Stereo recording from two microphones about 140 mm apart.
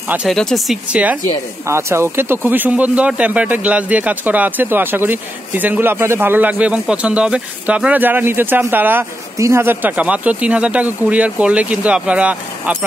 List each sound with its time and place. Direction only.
0.3 s speech: 5° left (ahead or behind)
1.7 s speech: 20° right (ahead or behind)